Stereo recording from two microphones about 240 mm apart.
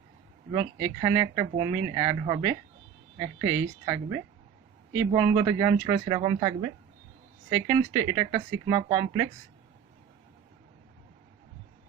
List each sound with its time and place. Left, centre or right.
0.5 s speech: centre